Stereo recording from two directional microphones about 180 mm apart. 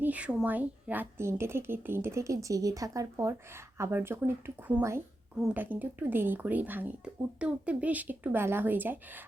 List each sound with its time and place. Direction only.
0.0 s speech: 10° right (ahead or behind)